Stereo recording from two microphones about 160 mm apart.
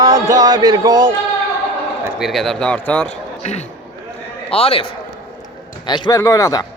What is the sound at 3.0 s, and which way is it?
A man's voice, 45° left (ahead or behind).